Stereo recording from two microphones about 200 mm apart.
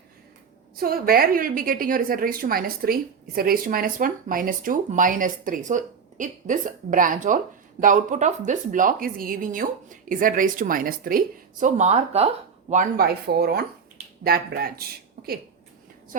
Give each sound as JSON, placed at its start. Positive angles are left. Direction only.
{"t": 0.8, "sound": "a woman's voice", "side_deg": -50}
{"t": 11.6, "sound": "a woman's voice", "side_deg": -35}